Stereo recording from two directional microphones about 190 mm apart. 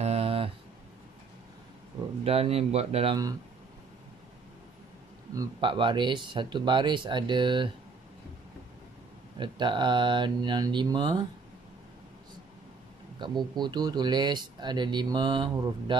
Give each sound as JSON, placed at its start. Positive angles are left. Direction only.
{"t": 0.0, "sound": "a sound", "side_deg": -30}
{"t": 2.2, "sound": "speech", "side_deg": -30}
{"t": 5.3, "sound": "speech", "side_deg": -20}
{"t": 9.4, "sound": "speech", "side_deg": -25}
{"t": 13.2, "sound": "speech", "side_deg": -25}